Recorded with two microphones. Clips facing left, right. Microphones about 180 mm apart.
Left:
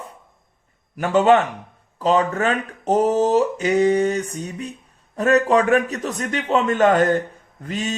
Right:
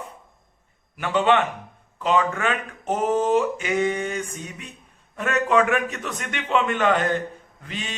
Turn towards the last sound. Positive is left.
turn(degrees=40)  # may be behind; listen again after turning